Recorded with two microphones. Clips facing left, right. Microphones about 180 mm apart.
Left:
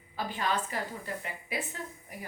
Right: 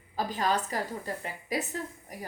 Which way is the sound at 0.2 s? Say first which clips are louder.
Right 3 dB; 40° right (ahead or behind).